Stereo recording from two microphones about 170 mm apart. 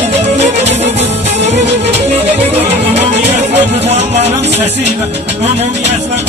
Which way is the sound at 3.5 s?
40° right (ahead or behind).